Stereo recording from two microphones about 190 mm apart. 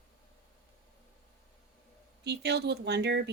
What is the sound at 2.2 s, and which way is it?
Speech, 60° right (ahead or behind).